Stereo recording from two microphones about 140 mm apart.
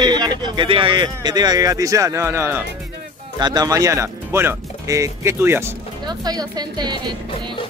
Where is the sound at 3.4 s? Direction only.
30° right (ahead or behind).